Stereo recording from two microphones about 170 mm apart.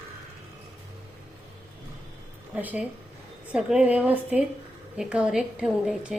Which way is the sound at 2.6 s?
10° right (ahead or behind).